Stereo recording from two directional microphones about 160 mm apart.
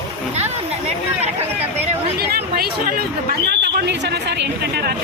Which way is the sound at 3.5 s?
90° right.